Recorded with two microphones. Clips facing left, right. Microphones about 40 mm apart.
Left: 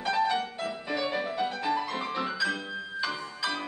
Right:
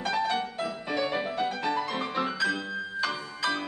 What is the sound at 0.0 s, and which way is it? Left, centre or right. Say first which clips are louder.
Music: left 1 dB; centre.